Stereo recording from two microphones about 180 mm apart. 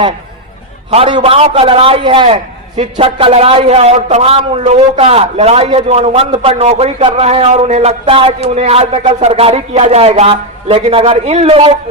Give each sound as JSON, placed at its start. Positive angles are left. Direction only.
{"t": 0.9, "sound": "a man's voice", "side_deg": -30}